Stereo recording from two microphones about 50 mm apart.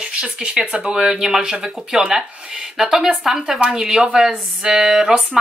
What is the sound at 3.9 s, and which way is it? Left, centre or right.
Speech, centre.